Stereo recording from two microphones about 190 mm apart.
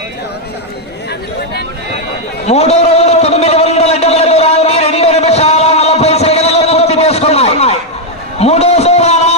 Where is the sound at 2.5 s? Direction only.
35° left (ahead or behind).